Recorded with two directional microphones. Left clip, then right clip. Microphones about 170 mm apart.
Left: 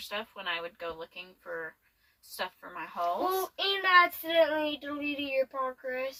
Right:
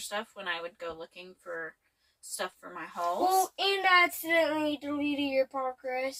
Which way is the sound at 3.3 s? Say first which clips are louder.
Right 3 dB; 20° right (ahead or behind).